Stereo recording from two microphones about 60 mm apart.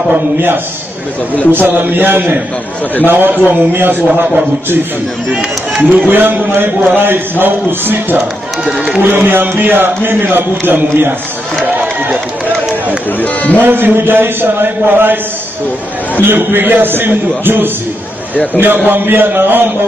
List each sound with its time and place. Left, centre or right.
0.1 s a man's voice: right
5.8 s a man's voice: right
11.6 s run: right
13.2 s speech: left
13.6 s a man's voice: right
16.2 s a man's voice: right
18.9 s a man's voice: right